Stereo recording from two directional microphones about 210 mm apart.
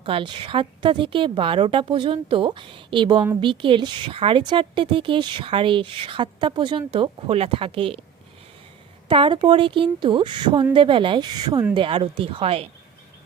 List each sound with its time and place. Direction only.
0.0 s a woman's voice: 25° right (ahead or behind)
9.0 s a woman's voice: 25° right (ahead or behind)